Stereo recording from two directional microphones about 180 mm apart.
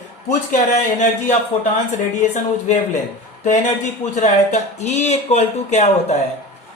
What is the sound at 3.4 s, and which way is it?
Speech, 40° left (ahead or behind).